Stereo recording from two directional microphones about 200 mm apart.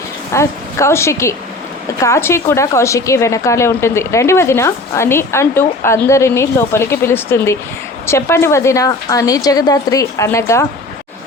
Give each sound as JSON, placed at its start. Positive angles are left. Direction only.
{"t": 0.3, "sound": "a woman's voice", "side_deg": 15}